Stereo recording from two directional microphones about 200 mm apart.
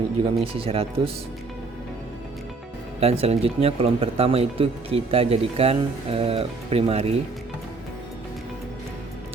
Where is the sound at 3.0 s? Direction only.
30° right (ahead or behind).